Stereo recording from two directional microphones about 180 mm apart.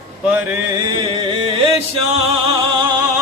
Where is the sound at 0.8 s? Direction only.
25° right (ahead or behind).